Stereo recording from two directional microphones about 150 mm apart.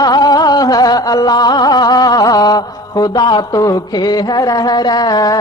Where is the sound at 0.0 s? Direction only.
25° left (ahead or behind).